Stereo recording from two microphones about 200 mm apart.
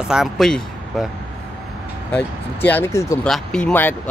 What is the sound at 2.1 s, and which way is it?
Speech, 5° left (ahead or behind).